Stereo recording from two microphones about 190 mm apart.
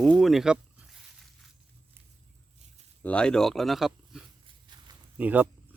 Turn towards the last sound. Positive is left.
turn(degrees=-10)  # may be behind; listen again after turning